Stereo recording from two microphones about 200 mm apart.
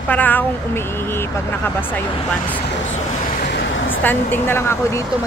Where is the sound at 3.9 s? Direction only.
10° left (ahead or behind).